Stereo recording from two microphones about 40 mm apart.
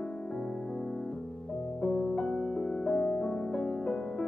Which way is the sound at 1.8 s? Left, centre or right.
Centre.